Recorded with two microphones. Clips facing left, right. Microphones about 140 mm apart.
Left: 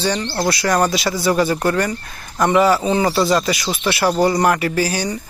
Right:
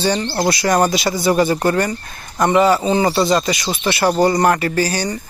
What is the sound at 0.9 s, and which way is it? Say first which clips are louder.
Speech: right 2 dB; centre (ahead or behind).